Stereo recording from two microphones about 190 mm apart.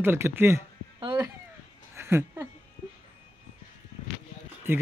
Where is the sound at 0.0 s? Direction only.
10° right (ahead or behind).